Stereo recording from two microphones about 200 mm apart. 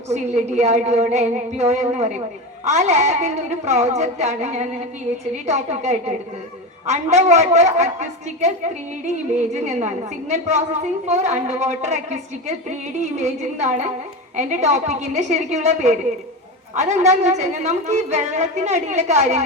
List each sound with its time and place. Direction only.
0.1 s a woman's voice: 35° right (ahead or behind)